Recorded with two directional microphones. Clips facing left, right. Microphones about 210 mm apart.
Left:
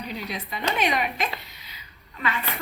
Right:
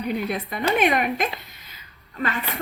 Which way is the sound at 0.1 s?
55° right (ahead or behind).